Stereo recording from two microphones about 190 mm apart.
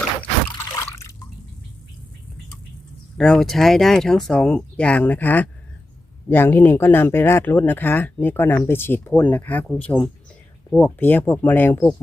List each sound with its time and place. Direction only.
0.8 s drip: 15° left (ahead or behind)
3.2 s speech: 5° left (ahead or behind)